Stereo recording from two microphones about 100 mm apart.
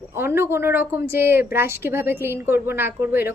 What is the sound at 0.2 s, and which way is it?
A woman's voice, 25° right (ahead or behind).